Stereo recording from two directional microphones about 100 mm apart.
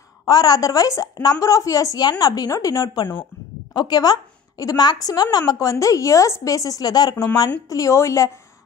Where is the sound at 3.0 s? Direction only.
55° left (ahead or behind).